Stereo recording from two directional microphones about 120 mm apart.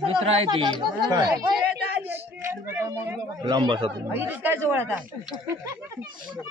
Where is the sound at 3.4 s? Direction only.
40° right (ahead or behind).